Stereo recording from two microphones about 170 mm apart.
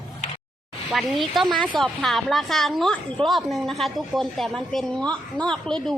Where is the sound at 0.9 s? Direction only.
Centre (ahead or behind).